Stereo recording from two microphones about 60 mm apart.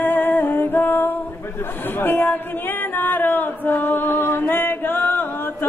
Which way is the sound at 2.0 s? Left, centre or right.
Left.